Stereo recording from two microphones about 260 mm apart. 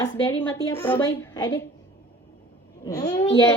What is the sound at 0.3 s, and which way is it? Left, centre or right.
A child's voice, centre.